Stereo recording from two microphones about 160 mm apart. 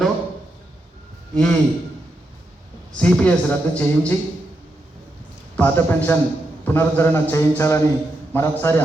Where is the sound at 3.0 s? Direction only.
5° left (ahead or behind).